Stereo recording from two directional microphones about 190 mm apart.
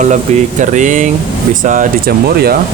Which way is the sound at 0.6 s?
40° right (ahead or behind).